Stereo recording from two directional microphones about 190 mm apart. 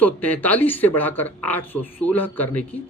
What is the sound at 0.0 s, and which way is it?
Speech, 10° left (ahead or behind).